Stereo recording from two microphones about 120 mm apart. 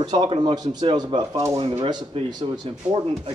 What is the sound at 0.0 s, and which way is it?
Speech, 40° right (ahead or behind).